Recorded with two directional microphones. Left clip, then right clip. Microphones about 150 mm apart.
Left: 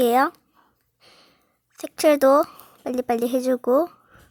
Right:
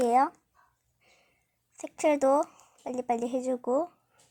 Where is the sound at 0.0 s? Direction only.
20° left (ahead or behind).